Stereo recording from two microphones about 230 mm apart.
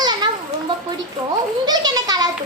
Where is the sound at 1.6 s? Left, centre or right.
Centre.